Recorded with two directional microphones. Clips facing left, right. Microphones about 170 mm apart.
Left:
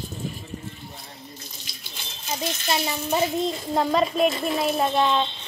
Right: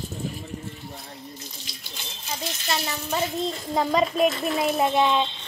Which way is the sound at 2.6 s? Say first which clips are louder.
Left 2 dB; 15° left (ahead or behind).